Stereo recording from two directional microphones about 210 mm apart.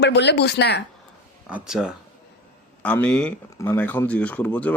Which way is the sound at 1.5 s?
Centre (ahead or behind).